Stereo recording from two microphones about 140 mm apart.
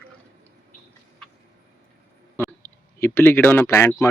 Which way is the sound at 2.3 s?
15° left (ahead or behind).